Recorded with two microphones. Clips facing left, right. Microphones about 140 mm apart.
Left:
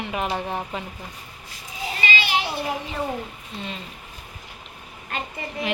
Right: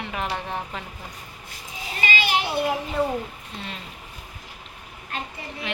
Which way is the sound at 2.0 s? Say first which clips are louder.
Right 1 dB; 50° right (ahead or behind).